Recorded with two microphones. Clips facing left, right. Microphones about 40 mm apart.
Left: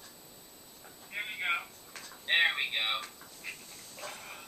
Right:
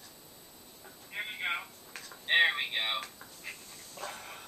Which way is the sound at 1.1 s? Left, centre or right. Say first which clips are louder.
Left 2 dB; centre.